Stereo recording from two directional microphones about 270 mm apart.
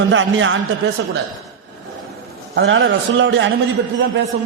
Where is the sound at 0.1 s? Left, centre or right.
Right.